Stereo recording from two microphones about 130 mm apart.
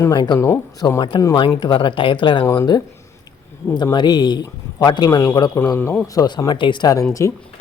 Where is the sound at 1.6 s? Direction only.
40° left (ahead or behind).